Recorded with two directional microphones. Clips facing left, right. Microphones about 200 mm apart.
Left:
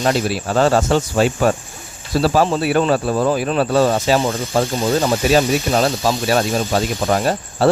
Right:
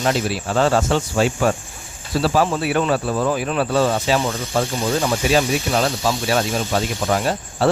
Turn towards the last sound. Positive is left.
turn(degrees=40)  # may be behind; listen again after turning